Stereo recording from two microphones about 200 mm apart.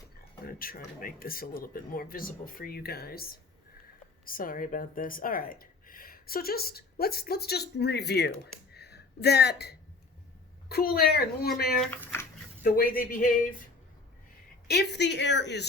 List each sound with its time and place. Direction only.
0.4 s speech: 45° left (ahead or behind)
8.7 s a sound: 55° left (ahead or behind)
10.7 s speech: 50° left (ahead or behind)
14.7 s speech: 55° left (ahead or behind)